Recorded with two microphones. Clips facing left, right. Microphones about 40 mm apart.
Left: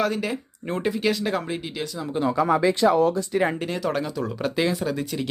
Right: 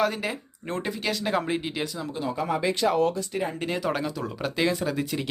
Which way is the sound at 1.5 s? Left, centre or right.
Centre.